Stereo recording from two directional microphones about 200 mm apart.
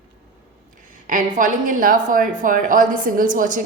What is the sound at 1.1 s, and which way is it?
Speech, 40° right (ahead or behind).